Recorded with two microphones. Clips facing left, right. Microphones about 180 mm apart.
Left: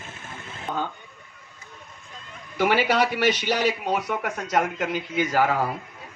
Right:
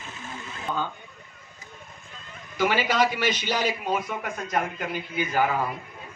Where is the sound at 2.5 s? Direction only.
65° left (ahead or behind); by 5.7 s 80° left.